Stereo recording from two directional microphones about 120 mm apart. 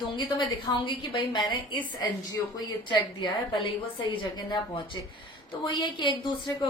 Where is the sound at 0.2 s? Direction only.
40° left (ahead or behind).